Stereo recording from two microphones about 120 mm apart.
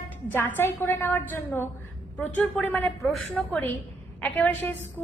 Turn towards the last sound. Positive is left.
turn(degrees=15)  # may be behind; listen again after turning